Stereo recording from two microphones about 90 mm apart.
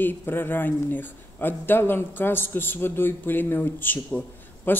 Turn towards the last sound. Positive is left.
turn(degrees=20)  # may be behind; listen again after turning